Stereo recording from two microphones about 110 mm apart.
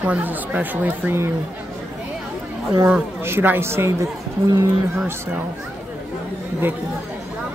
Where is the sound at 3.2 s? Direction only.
20° right (ahead or behind).